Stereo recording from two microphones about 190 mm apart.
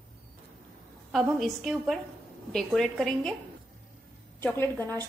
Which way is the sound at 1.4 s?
Centre (ahead or behind).